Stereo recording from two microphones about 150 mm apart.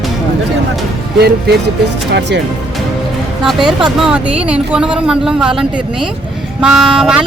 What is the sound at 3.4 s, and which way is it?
Speech, centre (ahead or behind).